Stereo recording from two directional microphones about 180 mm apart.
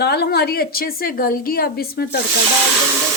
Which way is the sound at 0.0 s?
65° left (ahead or behind).